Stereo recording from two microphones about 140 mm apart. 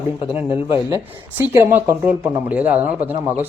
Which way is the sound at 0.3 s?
15° right (ahead or behind).